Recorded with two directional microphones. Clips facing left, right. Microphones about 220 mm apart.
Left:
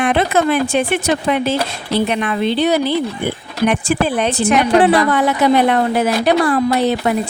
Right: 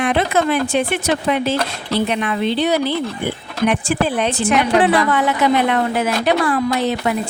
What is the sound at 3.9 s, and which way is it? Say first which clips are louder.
A woman's voice: left 2 dB; 40° left (ahead or behind).